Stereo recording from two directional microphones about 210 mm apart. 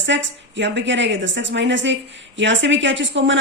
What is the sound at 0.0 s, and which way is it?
A woman's voice, 60° right (ahead or behind).